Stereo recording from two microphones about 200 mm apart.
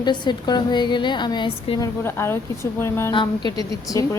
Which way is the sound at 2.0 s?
10° left (ahead or behind).